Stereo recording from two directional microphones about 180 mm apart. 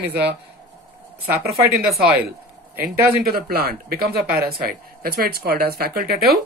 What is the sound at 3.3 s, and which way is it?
Speech, 60° right (ahead or behind).